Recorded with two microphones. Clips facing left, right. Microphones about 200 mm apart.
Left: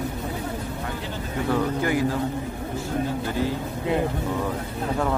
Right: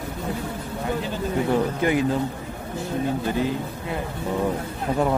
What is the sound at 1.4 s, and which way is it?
Speech, 20° right (ahead or behind).